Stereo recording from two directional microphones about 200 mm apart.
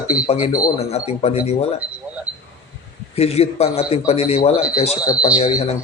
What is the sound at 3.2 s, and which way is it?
A man's voice, 30° left (ahead or behind).